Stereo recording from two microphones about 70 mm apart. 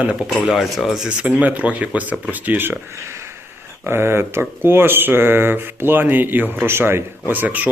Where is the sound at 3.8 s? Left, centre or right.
Right.